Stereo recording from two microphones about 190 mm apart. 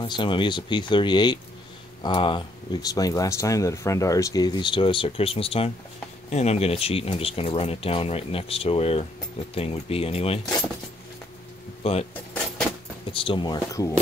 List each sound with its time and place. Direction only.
0.0 s speech: 25° left (ahead or behind)
11.8 s speech: 30° left (ahead or behind)
13.1 s speech: 25° left (ahead or behind)